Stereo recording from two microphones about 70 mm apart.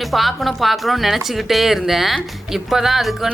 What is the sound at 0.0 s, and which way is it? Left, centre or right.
A woman's voice, centre.